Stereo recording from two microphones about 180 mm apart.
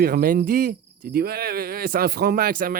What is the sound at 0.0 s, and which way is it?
Speech, 55° right (ahead or behind).